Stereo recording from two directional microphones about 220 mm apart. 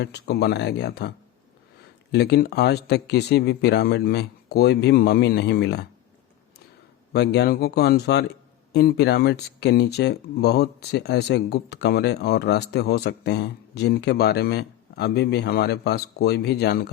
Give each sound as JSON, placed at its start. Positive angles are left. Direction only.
{"t": 0.0, "sound": "speech", "side_deg": 50}
{"t": 2.1, "sound": "speech", "side_deg": 50}
{"t": 7.1, "sound": "speech", "side_deg": 50}